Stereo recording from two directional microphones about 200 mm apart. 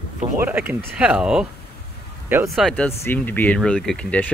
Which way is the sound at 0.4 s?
10° right (ahead or behind).